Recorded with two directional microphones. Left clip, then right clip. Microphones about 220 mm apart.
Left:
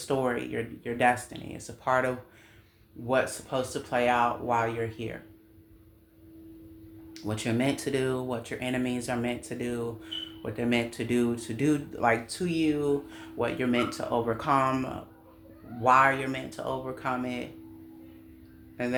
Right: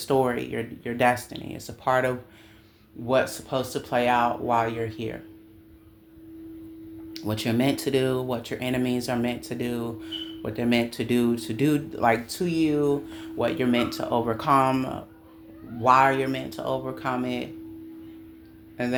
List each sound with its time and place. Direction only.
0.0 s speech: 30° right (ahead or behind)
7.1 s speech: 25° right (ahead or behind)
18.8 s speech: 25° right (ahead or behind)